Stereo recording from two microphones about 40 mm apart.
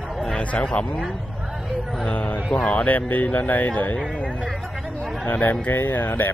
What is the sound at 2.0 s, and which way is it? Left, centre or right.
Speech, left.